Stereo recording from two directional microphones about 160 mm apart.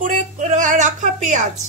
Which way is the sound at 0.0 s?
50° right (ahead or behind).